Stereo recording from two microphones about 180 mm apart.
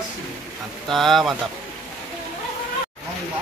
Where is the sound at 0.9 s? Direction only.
Centre (ahead or behind).